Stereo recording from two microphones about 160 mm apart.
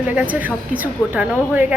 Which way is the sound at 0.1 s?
10° right (ahead or behind).